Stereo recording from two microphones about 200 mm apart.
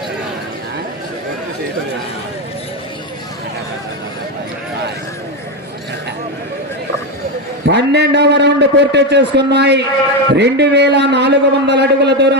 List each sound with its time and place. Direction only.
7.6 s a man's voice: 60° right (ahead or behind)